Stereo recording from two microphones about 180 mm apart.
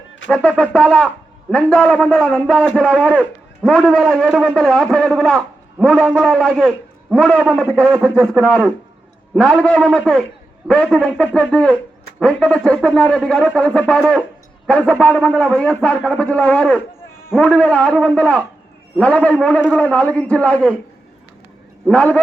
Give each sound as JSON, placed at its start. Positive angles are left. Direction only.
{"t": 0.3, "sound": "a man's voice", "side_deg": 5}
{"t": 21.8, "sound": "a man's voice", "side_deg": 5}